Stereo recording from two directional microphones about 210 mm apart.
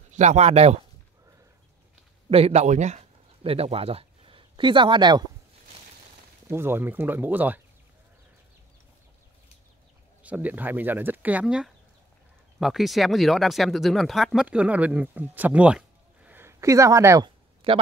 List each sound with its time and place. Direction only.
0.1 s speech: 35° right (ahead or behind)
2.2 s speech: 30° right (ahead or behind)
6.5 s speech: 10° right (ahead or behind)
10.2 s speech: 5° right (ahead or behind)